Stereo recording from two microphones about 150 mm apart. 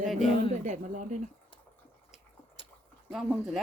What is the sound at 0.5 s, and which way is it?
Speech, 55° right (ahead or behind).